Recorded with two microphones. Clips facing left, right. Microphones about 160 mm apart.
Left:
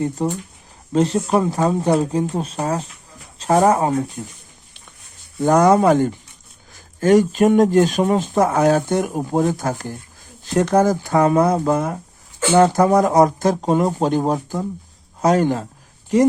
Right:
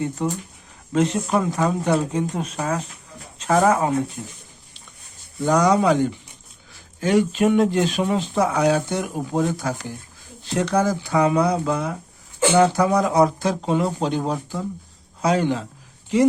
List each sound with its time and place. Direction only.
0.0 s speech: 35° left (ahead or behind)
5.4 s speech: 50° left (ahead or behind)